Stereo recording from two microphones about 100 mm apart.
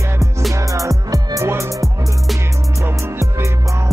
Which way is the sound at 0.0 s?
30° right (ahead or behind).